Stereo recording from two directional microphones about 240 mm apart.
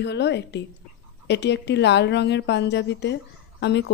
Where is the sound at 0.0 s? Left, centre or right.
Left.